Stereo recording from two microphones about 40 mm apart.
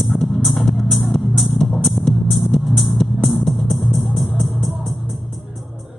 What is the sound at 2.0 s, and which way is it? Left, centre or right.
Music, left.